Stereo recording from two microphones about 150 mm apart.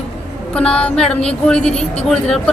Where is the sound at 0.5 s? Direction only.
5° left (ahead or behind).